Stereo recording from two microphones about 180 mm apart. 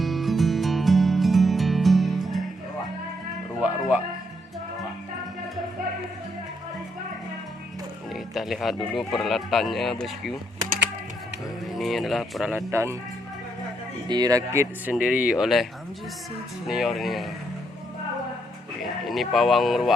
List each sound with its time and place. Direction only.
0.0 s music: centre (ahead or behind)
3.6 s music: 5° right (ahead or behind)
8.1 s music: centre (ahead or behind)
9.0 s speech: centre (ahead or behind)
11.7 s speech: centre (ahead or behind)
12.7 s speech: 15° right (ahead or behind)
14.1 s speech: 20° right (ahead or behind); by 15.6 s centre (ahead or behind)
16.6 s speech: centre (ahead or behind)
19.0 s speech: centre (ahead or behind)